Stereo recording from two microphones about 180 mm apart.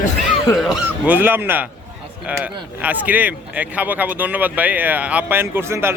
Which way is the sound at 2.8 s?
10° right (ahead or behind).